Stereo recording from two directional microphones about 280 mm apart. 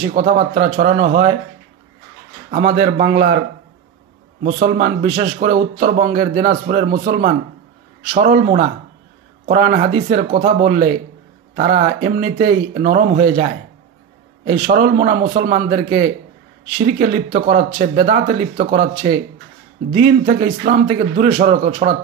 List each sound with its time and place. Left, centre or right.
0.1 s speech: right
2.5 s speech: right
4.4 s speech: right